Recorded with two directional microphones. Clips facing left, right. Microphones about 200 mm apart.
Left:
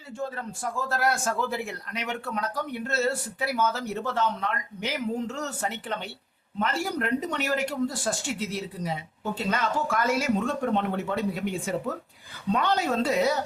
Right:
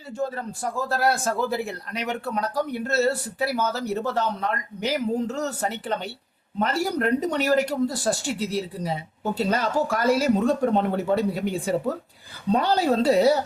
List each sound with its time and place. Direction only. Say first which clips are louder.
0.2 s a man's voice: right 5 dB; 40° right (ahead or behind)